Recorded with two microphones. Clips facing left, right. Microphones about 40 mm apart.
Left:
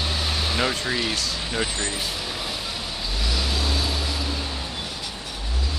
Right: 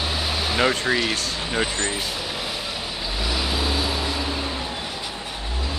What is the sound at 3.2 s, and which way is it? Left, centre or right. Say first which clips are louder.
Vehicle: right 2 dB; centre.